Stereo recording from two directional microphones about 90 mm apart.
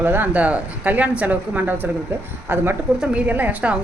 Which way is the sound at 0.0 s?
20° right (ahead or behind).